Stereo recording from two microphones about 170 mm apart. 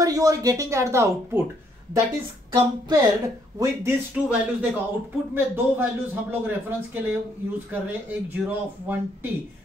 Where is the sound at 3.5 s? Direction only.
15° right (ahead or behind).